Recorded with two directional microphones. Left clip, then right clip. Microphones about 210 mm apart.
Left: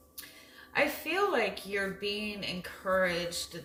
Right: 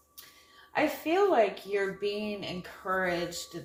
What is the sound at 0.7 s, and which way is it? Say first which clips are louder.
A woman's voice: right 2 dB; 15° right (ahead or behind).